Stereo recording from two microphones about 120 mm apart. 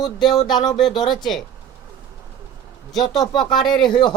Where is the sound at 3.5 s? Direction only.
40° left (ahead or behind).